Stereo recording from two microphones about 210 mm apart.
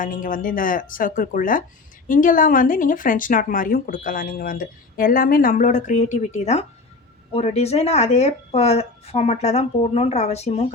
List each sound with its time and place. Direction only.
0.0 s speech: 40° left (ahead or behind)